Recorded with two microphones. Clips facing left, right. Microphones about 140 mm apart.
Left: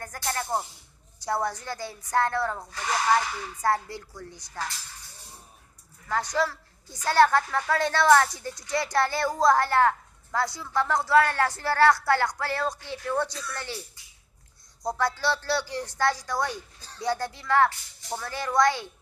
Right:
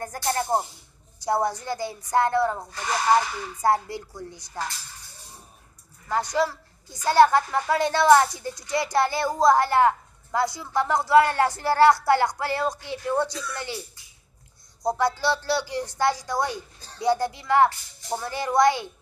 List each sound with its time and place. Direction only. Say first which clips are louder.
0.0 s music: right 5 dB; 30° right (ahead or behind)
1.2 s speech: right 4 dB; 20° right (ahead or behind)
6.0 s a woman's voice: right 3 dB; 15° right (ahead or behind)
14.8 s a woman's voice: right 4 dB; 25° right (ahead or behind)